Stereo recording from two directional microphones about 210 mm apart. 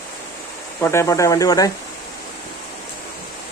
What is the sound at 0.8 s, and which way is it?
Speech, 10° left (ahead or behind).